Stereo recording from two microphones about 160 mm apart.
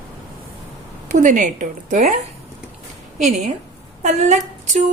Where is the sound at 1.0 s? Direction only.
50° right (ahead or behind).